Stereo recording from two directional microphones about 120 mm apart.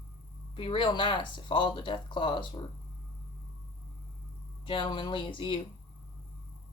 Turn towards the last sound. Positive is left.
turn(degrees=45)  # may be behind; listen again after turning